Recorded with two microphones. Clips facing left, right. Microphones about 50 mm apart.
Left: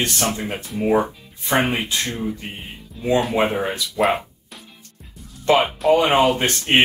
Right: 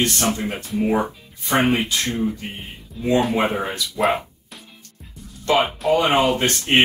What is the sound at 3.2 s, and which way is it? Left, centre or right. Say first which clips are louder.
Speech: even; centre.